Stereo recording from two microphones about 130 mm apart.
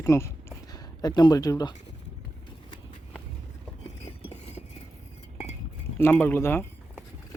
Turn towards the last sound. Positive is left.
turn(degrees=15)  # may be behind; listen again after turning